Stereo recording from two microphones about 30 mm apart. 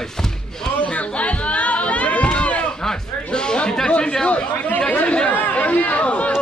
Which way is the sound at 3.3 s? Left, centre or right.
Left.